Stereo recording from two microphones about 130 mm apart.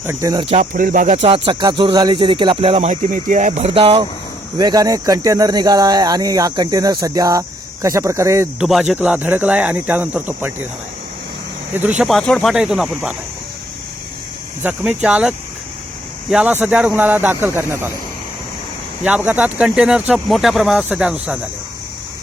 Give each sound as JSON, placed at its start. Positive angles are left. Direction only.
{"t": 0.0, "sound": "speech", "side_deg": -20}
{"t": 0.5, "sound": "speech", "side_deg": -80}
{"t": 1.5, "sound": "speech", "side_deg": -40}
{"t": 2.9, "sound": "speech", "side_deg": -75}
{"t": 3.8, "sound": "speech", "side_deg": -45}
{"t": 4.5, "sound": "speech", "side_deg": -30}
{"t": 8.5, "sound": "speech", "side_deg": -5}
{"t": 9.0, "sound": "speech", "side_deg": -15}
{"t": 11.7, "sound": "speech", "side_deg": -10}
{"t": 12.0, "sound": "speech", "side_deg": 5}
{"t": 14.6, "sound": "speech", "side_deg": -10}
{"t": 19.0, "sound": "speech", "side_deg": -10}